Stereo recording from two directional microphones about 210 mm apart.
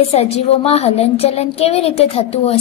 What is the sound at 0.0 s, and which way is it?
A woman's voice, 30° left (ahead or behind).